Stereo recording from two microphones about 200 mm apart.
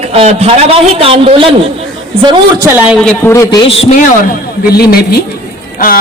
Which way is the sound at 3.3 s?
20° left (ahead or behind).